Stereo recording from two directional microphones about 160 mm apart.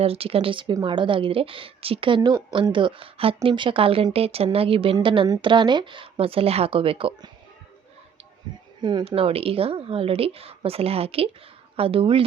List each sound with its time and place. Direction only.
0.0 s a woman's voice: 35° right (ahead or behind)
8.5 s a woman's voice: 30° right (ahead or behind)